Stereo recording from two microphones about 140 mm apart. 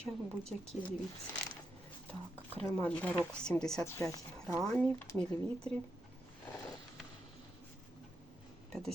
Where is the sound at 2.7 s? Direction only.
10° left (ahead or behind).